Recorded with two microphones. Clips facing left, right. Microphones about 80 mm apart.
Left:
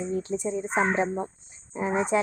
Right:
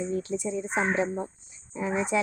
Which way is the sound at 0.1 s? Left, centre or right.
Left.